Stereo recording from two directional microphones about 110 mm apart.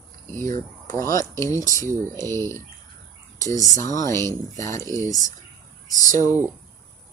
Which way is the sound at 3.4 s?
30° left (ahead or behind).